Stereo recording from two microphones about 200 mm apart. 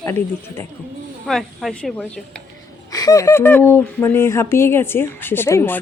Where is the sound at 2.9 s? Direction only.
20° left (ahead or behind).